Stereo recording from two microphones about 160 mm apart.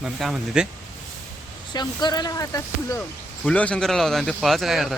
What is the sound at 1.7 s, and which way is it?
Speech, 25° left (ahead or behind).